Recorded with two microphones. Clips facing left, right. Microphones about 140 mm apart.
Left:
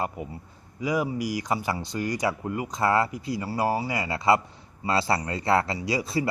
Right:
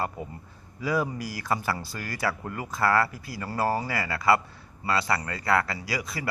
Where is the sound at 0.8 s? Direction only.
15° left (ahead or behind).